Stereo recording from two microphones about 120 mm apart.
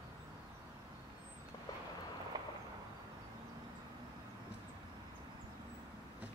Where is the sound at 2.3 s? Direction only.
35° right (ahead or behind).